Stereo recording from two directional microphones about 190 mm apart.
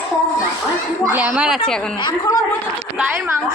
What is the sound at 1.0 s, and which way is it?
Speech, 10° right (ahead or behind).